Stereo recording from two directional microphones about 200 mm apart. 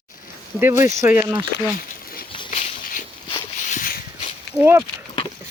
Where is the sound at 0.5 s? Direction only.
10° right (ahead or behind).